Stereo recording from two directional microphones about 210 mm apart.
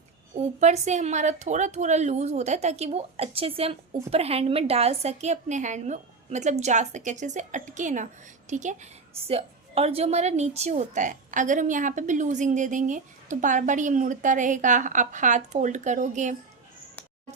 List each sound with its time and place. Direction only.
0.3 s a woman's voice: 30° right (ahead or behind)